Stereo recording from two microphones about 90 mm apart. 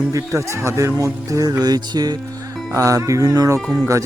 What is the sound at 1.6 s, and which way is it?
Speech, 50° right (ahead or behind).